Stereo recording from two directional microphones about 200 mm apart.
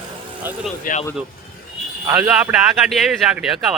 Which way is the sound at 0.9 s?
45° left (ahead or behind).